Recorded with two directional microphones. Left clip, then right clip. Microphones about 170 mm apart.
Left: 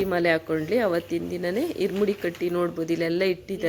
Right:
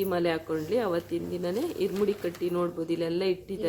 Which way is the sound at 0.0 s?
20° left (ahead or behind).